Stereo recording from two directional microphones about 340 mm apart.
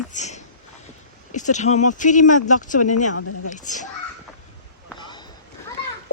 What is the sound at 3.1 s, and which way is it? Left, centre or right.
Speech, left.